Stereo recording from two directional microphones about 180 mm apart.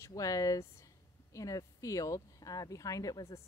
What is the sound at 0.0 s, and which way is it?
Speech, 20° left (ahead or behind).